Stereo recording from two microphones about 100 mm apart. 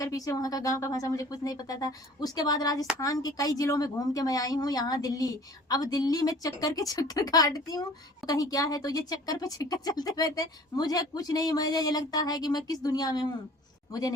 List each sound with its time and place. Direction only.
0.0 s speech: 35° left (ahead or behind)